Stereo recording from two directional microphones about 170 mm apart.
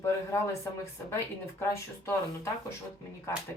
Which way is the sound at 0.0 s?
15° left (ahead or behind).